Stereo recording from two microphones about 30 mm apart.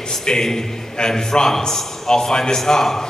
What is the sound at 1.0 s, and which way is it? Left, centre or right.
A man's voice, left.